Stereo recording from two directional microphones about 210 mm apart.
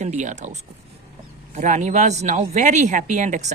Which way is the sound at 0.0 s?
35° right (ahead or behind).